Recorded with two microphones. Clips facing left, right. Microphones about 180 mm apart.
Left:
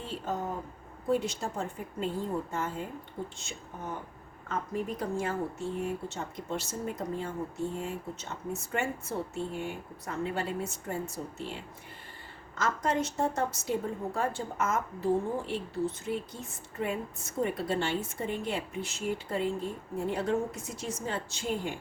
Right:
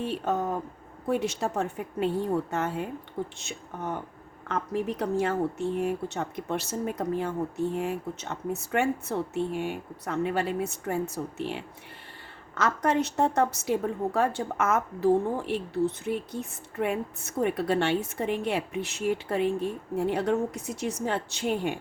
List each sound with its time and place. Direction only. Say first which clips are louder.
0.0 s speech: right 6 dB; 70° right (ahead or behind)
4.4 s speech: right 4 dB; 75° right (ahead or behind)